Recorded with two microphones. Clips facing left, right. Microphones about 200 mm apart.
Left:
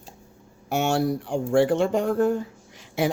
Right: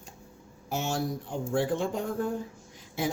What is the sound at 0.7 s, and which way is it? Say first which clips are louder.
Speech: left 8 dB; 75° left (ahead or behind).